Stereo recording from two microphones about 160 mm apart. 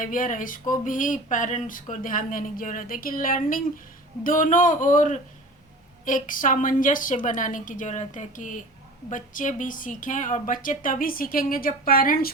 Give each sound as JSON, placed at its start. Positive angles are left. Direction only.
{"t": 0.0, "sound": "speech", "side_deg": 55}